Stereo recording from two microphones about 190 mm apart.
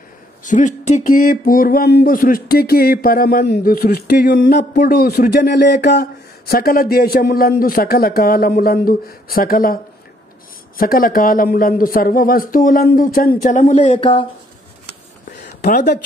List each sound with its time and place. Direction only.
0.4 s speech: 40° left (ahead or behind)
10.8 s speech: 50° left (ahead or behind)
13.9 s speech: 25° left (ahead or behind)
15.4 s a sound: 40° left (ahead or behind)